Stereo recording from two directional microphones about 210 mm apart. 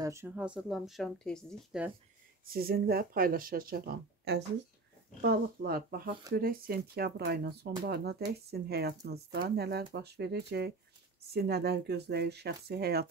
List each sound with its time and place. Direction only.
0.0 s speech: 10° right (ahead or behind)
2.4 s speech: 45° right (ahead or behind)